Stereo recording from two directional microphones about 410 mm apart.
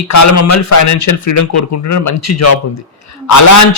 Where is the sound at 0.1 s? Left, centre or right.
Left.